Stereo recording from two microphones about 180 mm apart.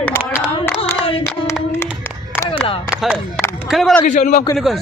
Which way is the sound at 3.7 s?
Centre (ahead or behind).